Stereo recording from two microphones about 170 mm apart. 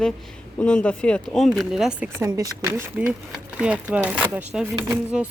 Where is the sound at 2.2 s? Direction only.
20° right (ahead or behind).